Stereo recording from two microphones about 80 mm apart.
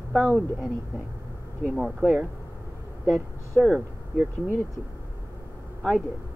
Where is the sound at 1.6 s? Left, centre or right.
Centre.